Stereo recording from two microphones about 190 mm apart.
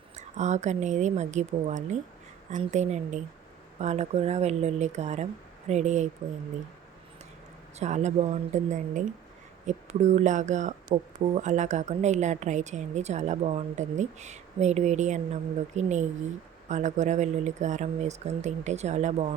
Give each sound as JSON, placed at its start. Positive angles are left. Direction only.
{"t": 0.2, "sound": "a woman's voice", "side_deg": -40}
{"t": 7.8, "sound": "a woman's voice", "side_deg": -40}